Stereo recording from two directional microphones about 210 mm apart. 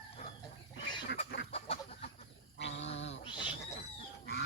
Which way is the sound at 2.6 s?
60° left (ahead or behind).